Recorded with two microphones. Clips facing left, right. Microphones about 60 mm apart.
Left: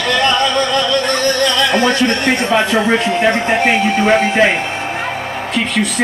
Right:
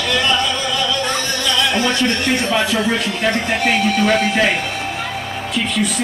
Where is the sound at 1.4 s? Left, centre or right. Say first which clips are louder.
Left 2 dB; left.